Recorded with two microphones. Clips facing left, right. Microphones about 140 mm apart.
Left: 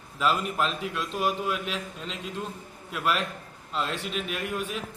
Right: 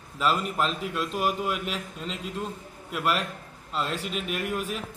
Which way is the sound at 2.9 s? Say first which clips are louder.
Right 1 dB; 5° right (ahead or behind).